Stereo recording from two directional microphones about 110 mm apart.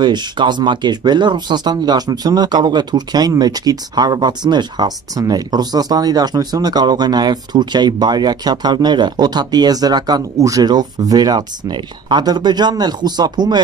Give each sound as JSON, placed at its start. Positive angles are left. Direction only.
{"t": 0.0, "sound": "speech", "side_deg": -40}